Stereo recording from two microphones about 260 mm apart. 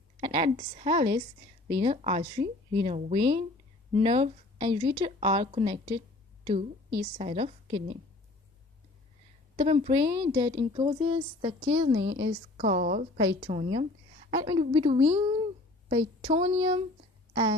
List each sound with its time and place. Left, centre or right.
0.2 s a woman's voice: right
7.2 s a woman's voice: right
9.6 s a woman's voice: centre
17.3 s a sound: centre